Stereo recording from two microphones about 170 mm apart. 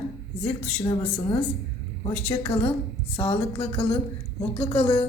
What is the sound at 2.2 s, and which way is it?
Speech, 35° left (ahead or behind).